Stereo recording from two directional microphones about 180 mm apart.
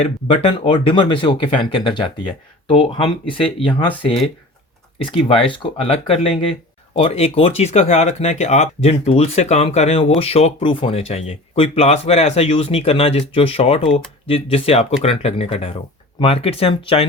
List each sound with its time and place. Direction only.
0.0 s speech: 30° left (ahead or behind)
4.9 s speech: 30° left (ahead or behind)